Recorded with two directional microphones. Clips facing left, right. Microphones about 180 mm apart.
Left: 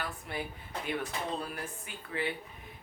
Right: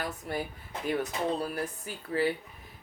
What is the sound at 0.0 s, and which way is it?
Speech, 40° right (ahead or behind).